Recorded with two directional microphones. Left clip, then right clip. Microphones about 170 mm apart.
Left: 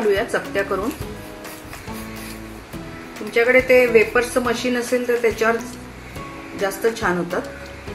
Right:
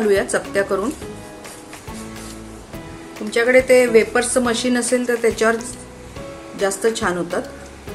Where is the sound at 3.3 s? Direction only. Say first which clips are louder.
Right 1 dB; 25° right (ahead or behind).